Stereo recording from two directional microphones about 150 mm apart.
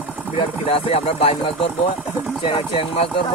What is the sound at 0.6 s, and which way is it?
Speech, 40° left (ahead or behind).